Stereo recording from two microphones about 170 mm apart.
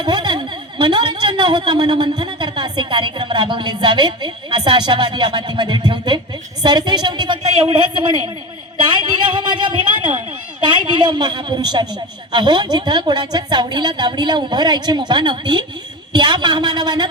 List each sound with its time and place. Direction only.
0.0 s speech: 25° right (ahead or behind)